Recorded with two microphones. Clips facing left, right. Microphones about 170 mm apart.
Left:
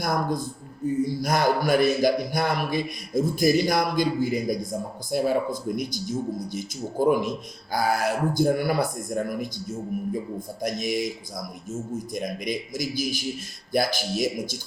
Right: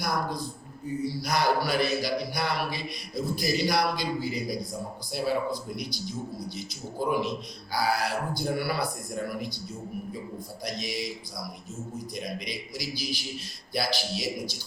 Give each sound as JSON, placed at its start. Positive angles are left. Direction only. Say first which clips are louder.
{"t": 0.0, "sound": "speech", "louder": "left 4 dB", "side_deg": 50}
{"t": 10.6, "sound": "speech", "louder": "left 7 dB", "side_deg": 50}